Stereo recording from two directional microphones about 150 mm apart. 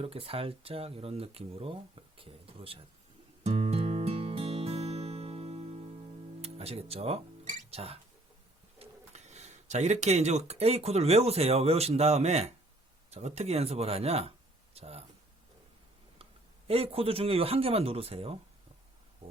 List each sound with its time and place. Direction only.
0.0 s speech: 40° right (ahead or behind)
3.4 s music: 45° right (ahead or behind)
8.8 s speech: 50° right (ahead or behind)
16.6 s speech: 40° right (ahead or behind)